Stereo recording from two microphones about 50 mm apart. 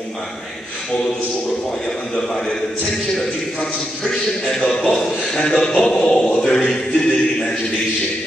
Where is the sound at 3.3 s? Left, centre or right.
Left.